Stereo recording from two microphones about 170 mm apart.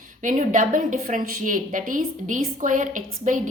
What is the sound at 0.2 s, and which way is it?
A woman's voice, 50° right (ahead or behind).